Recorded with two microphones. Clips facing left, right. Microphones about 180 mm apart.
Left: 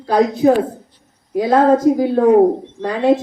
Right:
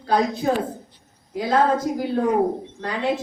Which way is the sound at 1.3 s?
65° left (ahead or behind).